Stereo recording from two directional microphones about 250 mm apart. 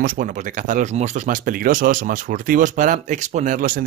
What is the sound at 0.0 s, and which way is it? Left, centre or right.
Speech, right.